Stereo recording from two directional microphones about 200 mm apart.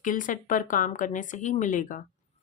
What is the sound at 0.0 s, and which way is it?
Speech, 40° left (ahead or behind).